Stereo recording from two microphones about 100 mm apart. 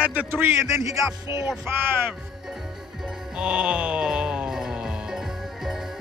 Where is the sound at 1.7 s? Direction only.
20° right (ahead or behind).